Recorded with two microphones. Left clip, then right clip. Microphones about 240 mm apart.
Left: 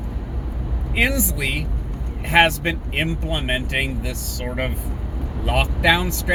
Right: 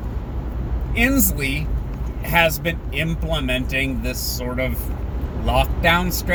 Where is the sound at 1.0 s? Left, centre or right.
Centre.